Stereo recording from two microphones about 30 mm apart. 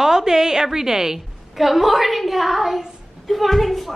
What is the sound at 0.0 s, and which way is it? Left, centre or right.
A woman's voice, centre.